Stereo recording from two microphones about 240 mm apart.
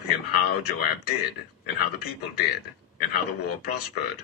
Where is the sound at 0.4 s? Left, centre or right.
Left.